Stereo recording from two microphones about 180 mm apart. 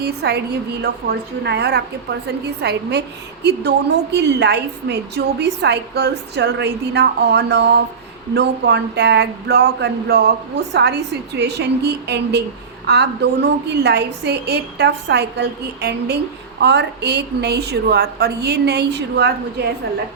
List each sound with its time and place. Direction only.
0.0 s a woman's voice: 65° right (ahead or behind)